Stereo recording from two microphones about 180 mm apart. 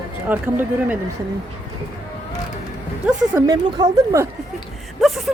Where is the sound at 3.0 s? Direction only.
5° right (ahead or behind).